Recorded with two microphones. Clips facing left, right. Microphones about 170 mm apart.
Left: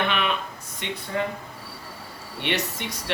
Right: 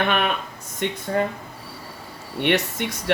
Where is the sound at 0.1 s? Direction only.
50° right (ahead or behind).